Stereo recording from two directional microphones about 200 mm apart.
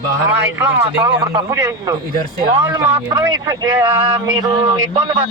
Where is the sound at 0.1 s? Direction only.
10° right (ahead or behind).